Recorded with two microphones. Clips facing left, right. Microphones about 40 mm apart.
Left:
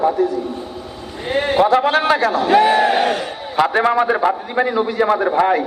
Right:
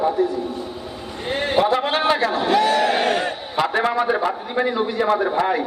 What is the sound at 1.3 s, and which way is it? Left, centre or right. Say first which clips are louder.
Speech: left 4 dB; centre.